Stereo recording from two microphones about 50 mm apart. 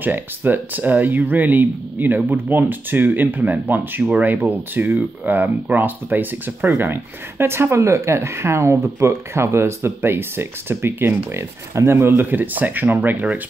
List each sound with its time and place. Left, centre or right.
0.0 s speech: right
7.8 s speech: right